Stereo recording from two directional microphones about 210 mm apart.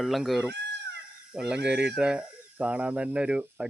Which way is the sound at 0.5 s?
55° right (ahead or behind).